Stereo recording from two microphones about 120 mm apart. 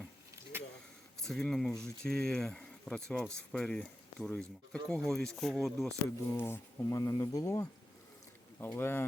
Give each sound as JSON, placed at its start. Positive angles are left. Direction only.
{"t": 0.5, "sound": "a sound", "side_deg": -20}
{"t": 1.2, "sound": "speech", "side_deg": 5}
{"t": 6.1, "sound": "speech", "side_deg": 20}